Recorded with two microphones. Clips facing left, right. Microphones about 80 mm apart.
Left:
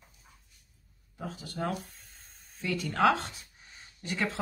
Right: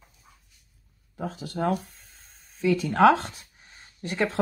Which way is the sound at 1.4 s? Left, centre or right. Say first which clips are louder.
Right 6 dB; right.